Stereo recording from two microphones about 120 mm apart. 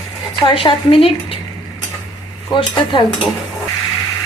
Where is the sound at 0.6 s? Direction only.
50° left (ahead or behind).